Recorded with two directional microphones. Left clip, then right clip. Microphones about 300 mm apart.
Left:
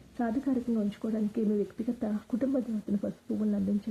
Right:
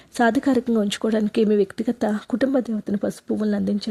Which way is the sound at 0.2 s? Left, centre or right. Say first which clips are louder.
Right 13 dB; right.